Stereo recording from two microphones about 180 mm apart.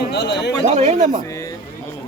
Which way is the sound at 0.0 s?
70° left (ahead or behind).